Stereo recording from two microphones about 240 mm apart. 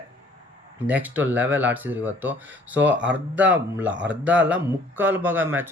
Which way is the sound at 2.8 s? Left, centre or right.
Right.